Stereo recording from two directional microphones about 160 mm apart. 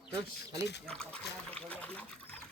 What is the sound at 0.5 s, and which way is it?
Speech, 90° left.